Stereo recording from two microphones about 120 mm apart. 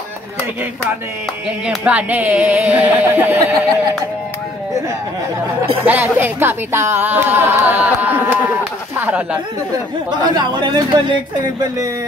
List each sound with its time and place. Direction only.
1.7 s speech: 10° right (ahead or behind)
5.9 s speech: 15° right (ahead or behind)
10.2 s speech: 40° right (ahead or behind)